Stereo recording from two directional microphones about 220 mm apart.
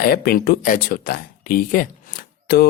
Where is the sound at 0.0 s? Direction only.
40° left (ahead or behind).